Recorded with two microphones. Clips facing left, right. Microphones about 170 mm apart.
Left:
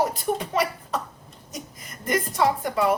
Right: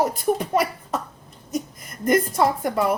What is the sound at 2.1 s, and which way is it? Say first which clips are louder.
Speech: right 4 dB; 50° right (ahead or behind).